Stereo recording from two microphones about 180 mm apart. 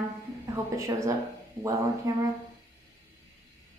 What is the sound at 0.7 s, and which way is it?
Speech, 15° right (ahead or behind).